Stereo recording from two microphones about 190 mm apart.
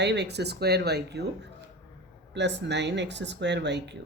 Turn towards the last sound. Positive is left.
turn(degrees=-65)  # may be behind; listen again after turning